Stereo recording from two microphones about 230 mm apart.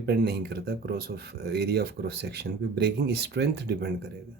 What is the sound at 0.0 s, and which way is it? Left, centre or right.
Speech, right.